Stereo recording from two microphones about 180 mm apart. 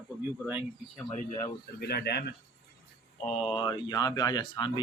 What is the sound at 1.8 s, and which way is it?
Speech, 65° left (ahead or behind).